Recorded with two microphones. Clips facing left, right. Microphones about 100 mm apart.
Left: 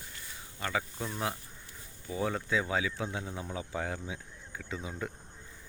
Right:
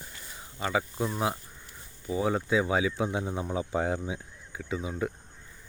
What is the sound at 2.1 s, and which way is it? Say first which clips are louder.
Speech: right 5 dB; 15° right (ahead or behind).